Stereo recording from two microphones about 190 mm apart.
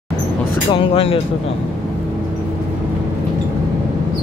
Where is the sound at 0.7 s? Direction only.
30° left (ahead or behind).